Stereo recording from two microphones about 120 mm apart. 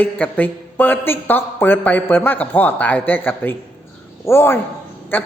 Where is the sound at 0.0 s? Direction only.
15° left (ahead or behind).